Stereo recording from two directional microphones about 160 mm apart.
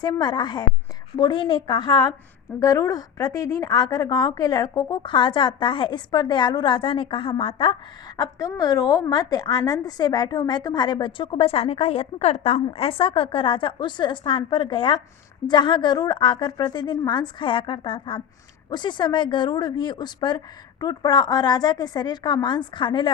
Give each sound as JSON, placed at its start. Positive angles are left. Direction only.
{"t": 0.0, "sound": "a woman's voice", "side_deg": 25}
{"t": 8.2, "sound": "a woman's voice", "side_deg": 20}